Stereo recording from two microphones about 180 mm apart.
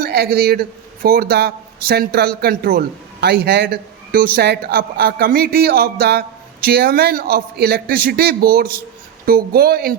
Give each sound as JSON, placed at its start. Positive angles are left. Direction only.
{"t": 0.0, "sound": "a man's voice", "side_deg": -60}